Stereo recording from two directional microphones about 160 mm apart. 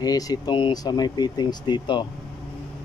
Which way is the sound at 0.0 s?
25° left (ahead or behind).